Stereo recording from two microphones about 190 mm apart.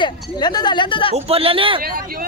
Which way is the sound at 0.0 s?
20° left (ahead or behind).